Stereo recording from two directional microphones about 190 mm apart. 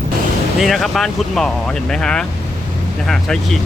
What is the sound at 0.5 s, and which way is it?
Speech, centre (ahead or behind).